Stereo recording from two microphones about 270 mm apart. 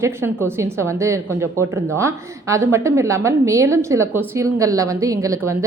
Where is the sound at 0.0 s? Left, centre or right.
Centre.